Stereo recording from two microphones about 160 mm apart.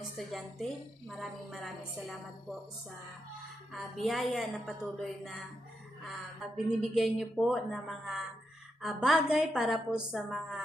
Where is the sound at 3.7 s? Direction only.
Centre (ahead or behind).